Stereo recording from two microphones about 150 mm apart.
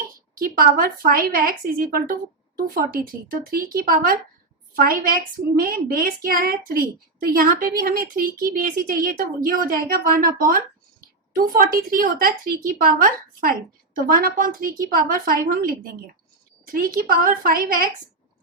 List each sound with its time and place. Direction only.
0.3 s a woman's voice: 75° right (ahead or behind)